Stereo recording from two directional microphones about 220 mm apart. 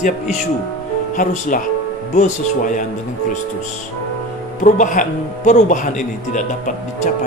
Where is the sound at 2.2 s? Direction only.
35° left (ahead or behind).